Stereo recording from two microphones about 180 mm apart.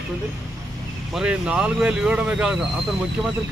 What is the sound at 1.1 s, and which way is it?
Speech, 5° right (ahead or behind).